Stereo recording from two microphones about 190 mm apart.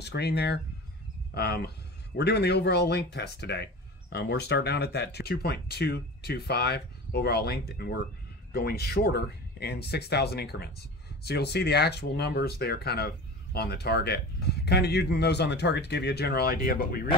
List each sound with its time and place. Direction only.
0.0 s speech: 60° left (ahead or behind)